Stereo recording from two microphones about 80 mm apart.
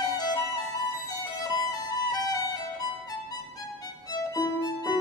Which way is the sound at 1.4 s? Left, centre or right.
Left.